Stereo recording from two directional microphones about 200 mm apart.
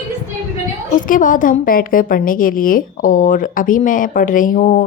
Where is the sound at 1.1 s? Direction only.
40° left (ahead or behind).